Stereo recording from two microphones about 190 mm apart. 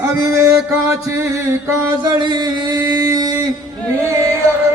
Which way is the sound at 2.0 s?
20° right (ahead or behind).